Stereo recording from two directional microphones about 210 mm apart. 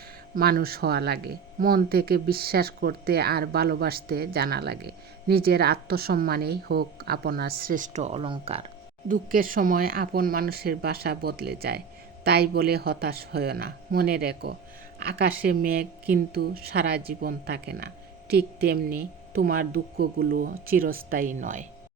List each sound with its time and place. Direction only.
0.3 s speech: 45° right (ahead or behind); by 8.6 s 25° right (ahead or behind)
9.0 s speech: 40° right (ahead or behind)